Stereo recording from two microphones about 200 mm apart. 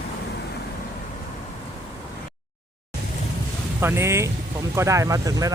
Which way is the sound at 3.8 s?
10° right (ahead or behind).